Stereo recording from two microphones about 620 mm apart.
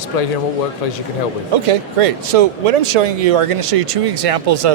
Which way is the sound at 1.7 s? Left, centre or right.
Right.